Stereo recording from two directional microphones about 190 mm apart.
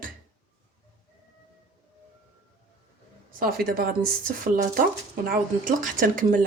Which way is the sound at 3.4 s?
50° right (ahead or behind).